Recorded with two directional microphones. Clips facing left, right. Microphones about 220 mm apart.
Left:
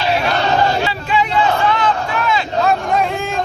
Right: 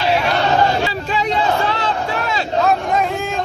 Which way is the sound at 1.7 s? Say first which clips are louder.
Left 3 dB; 35° right (ahead or behind).